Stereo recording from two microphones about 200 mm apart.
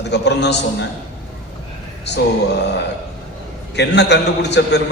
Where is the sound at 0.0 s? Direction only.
60° left (ahead or behind).